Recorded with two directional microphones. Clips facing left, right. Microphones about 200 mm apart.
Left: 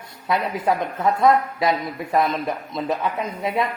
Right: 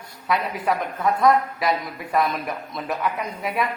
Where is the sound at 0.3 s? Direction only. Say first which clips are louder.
Left 2 dB; 25° left (ahead or behind).